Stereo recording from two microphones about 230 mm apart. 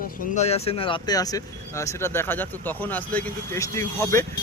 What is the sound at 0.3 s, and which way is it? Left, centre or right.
Speech, left.